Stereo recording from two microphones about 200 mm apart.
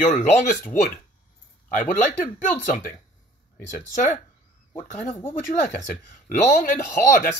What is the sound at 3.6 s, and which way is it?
Speech, 40° left (ahead or behind).